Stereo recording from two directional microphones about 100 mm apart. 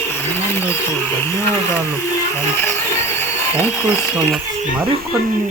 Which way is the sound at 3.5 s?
25° left (ahead or behind).